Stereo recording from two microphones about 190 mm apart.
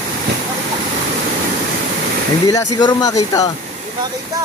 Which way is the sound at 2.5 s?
20° left (ahead or behind).